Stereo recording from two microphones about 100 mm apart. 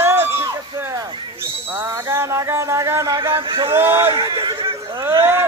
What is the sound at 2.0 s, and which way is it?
Speech, 25° right (ahead or behind).